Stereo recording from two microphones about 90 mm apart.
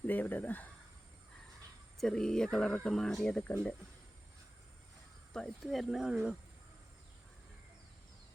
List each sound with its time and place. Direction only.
0.1 s speech: 20° left (ahead or behind)
2.0 s speech: 5° left (ahead or behind)
5.3 s speech: 5° left (ahead or behind)
5.9 s speech: 5° right (ahead or behind)